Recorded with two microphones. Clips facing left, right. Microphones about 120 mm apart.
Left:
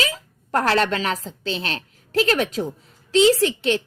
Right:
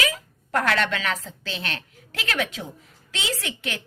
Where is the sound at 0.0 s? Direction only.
30° left (ahead or behind).